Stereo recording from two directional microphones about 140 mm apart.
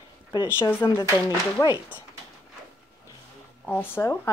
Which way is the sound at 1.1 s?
30° left (ahead or behind).